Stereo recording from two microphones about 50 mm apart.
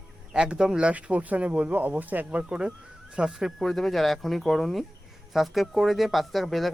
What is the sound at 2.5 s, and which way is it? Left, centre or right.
Speech, centre.